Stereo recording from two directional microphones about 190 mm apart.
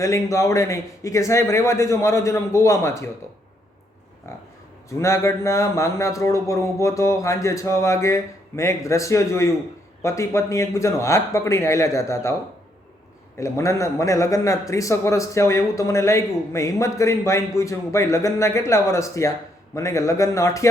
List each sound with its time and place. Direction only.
0.0 s a man's voice: 15° left (ahead or behind)
4.9 s a man's voice: 15° left (ahead or behind)
13.4 s a man's voice: 15° left (ahead or behind)